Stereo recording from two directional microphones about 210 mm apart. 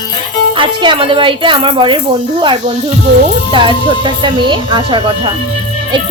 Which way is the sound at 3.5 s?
20° right (ahead or behind).